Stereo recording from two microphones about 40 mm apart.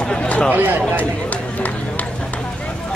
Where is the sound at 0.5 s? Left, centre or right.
Right.